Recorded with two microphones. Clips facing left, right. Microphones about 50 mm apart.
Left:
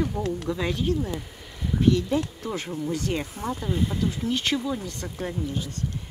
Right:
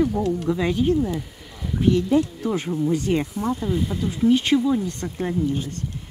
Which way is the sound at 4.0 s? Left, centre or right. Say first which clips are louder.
Right 7 dB; centre.